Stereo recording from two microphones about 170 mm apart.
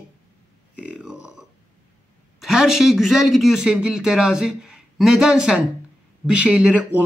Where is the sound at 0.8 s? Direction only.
5° right (ahead or behind).